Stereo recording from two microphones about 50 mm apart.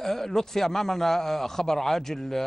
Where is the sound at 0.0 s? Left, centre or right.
Centre.